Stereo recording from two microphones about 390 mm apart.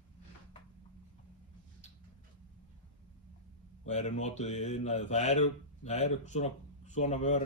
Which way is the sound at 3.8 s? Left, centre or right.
Centre.